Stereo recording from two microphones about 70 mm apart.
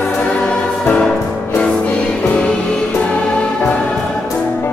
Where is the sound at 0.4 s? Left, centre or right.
Centre.